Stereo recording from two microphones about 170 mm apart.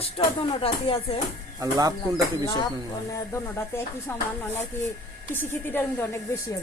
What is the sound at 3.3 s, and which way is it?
Speech, 15° left (ahead or behind).